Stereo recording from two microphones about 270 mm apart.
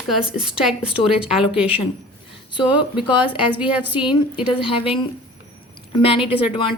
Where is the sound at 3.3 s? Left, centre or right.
Centre.